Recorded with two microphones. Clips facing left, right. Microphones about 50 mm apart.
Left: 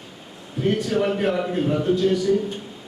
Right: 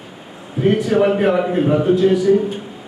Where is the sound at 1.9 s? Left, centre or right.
Centre.